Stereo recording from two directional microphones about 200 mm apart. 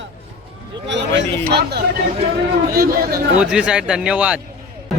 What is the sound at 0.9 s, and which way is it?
Speech, 60° right (ahead or behind).